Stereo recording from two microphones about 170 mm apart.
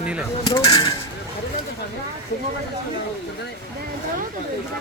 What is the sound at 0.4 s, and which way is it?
Speech, 25° left (ahead or behind).